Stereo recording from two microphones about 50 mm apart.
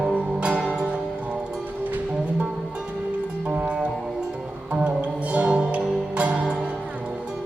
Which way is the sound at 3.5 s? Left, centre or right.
Right.